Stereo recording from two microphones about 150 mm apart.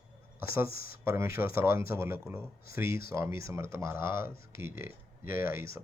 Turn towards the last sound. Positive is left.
turn(degrees=-15)  # may be behind; listen again after turning